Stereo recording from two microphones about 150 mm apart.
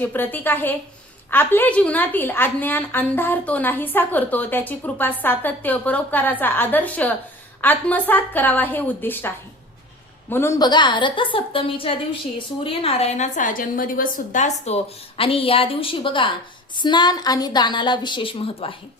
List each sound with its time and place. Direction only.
0.0 s a woman's voice: 10° left (ahead or behind)
10.6 s a woman's voice: 30° left (ahead or behind); by 14.8 s 50° left (ahead or behind)
15.2 s a woman's voice: 40° left (ahead or behind)